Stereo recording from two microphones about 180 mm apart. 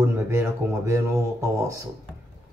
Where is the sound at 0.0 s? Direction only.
15° right (ahead or behind).